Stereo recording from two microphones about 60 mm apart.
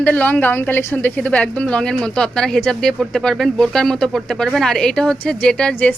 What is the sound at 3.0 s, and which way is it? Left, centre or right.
Speech, centre.